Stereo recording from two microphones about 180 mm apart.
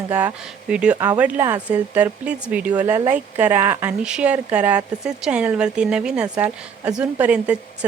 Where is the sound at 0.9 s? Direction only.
20° right (ahead or behind).